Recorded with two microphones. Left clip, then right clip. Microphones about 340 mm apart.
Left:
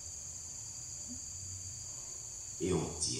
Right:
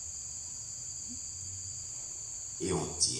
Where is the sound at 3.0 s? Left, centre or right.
Centre.